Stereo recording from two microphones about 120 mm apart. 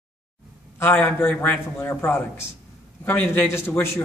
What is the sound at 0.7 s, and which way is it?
A man's voice, 15° left (ahead or behind).